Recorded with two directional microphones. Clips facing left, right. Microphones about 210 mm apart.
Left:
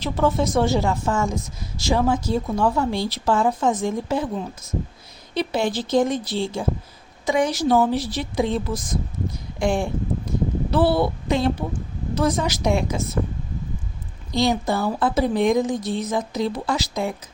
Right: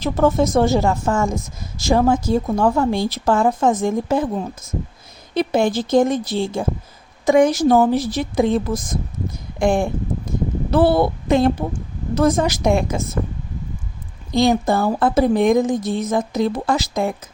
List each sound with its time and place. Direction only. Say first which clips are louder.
0.0 s speech: right 4 dB; 45° right (ahead or behind)
14.3 s speech: right 5 dB; 50° right (ahead or behind)